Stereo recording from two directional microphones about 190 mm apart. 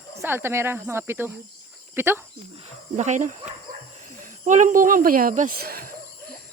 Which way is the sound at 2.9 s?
40° right (ahead or behind).